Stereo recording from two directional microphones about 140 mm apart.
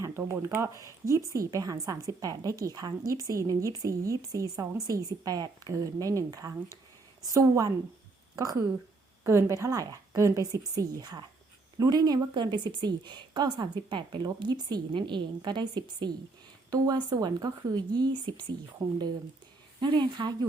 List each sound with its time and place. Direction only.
0.0 s a woman's voice: 20° right (ahead or behind)
9.2 s a woman's voice: 20° right (ahead or behind)
19.8 s speech: 35° right (ahead or behind)